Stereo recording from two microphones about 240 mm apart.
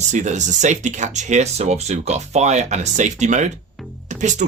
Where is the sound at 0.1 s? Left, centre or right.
Right.